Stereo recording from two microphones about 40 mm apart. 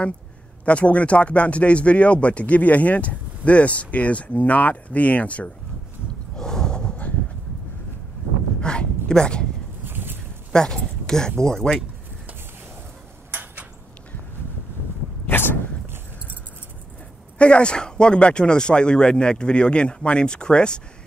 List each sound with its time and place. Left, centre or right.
0.7 s speech: left
6.3 s horse: centre
8.5 s speech: left
9.8 s boat: right
10.5 s speech: centre
13.3 s a sound: right
15.2 s a sound: left
17.4 s speech: left